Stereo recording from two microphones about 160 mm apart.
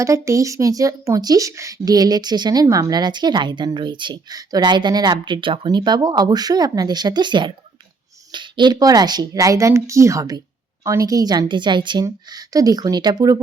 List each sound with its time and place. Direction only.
0.0 s speech: 20° right (ahead or behind)